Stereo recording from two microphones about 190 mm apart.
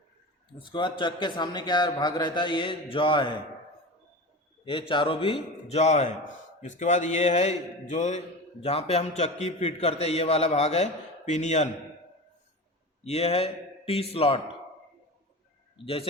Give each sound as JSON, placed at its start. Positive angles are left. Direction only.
{"t": 0.6, "sound": "a man's voice", "side_deg": 25}
{"t": 4.6, "sound": "a man's voice", "side_deg": 25}
{"t": 13.1, "sound": "a man's voice", "side_deg": 35}
{"t": 15.8, "sound": "a man's voice", "side_deg": 30}